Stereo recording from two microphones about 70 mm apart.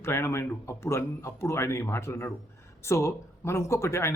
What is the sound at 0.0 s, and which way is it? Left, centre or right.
Speech, left.